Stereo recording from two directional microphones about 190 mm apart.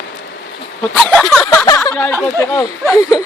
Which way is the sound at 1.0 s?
5° left (ahead or behind).